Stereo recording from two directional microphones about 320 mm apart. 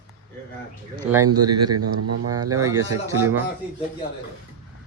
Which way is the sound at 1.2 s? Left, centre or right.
Right.